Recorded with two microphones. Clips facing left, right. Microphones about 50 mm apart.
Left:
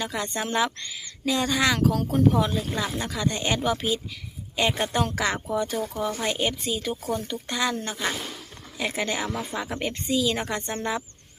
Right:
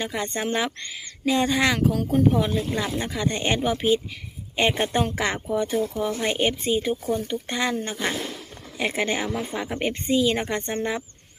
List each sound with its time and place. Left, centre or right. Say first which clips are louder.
0.1 s speech: right 1 dB; centre
3.0 s speech: right 2 dB; right
6.2 s speech: right 3 dB; right
9.2 s speech: right 2 dB; centre
9.8 s speech: right 4 dB; right